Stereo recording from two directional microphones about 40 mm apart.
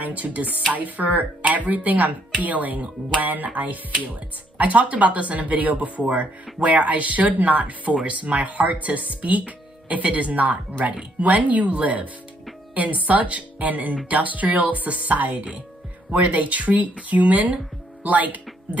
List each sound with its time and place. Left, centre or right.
0.0 s speech: right